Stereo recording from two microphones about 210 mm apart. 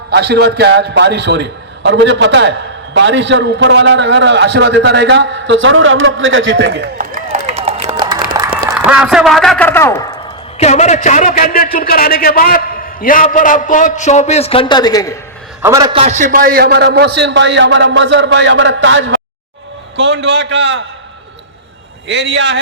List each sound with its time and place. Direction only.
0.1 s a man's voice: 50° right (ahead or behind); by 7.8 s 30° right (ahead or behind)
7.9 s music: 20° right (ahead or behind)
8.3 s a man's voice: 20° right (ahead or behind); by 10.1 s 10° left (ahead or behind)
10.6 s a man's voice: 30° left (ahead or behind); by 15.2 s 15° left (ahead or behind)
15.6 s a man's voice: 15° right (ahead or behind); by 20.8 s 55° right (ahead or behind)
22.0 s a man's voice: 55° right (ahead or behind)